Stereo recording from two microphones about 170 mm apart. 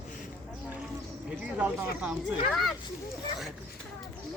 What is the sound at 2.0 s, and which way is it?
Speech, 5° right (ahead or behind).